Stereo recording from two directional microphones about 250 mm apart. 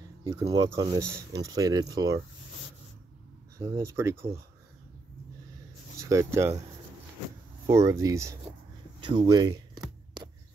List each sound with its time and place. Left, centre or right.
0.2 s speech: centre
3.5 s speech: centre
5.9 s speech: centre
7.6 s speech: centre